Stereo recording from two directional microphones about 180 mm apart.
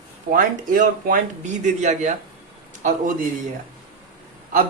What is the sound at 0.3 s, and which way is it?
Speech, 50° right (ahead or behind).